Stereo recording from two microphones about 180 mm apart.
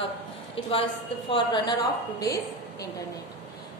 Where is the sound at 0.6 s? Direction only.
30° left (ahead or behind).